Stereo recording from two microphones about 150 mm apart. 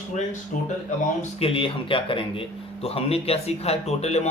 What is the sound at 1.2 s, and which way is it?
Speech, 40° left (ahead or behind).